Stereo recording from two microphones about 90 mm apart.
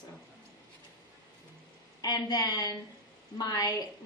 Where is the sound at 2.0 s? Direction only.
50° left (ahead or behind).